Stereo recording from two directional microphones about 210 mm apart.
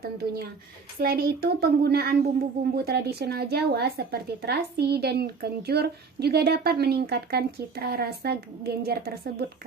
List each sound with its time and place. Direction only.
0.0 s speech: 45° right (ahead or behind)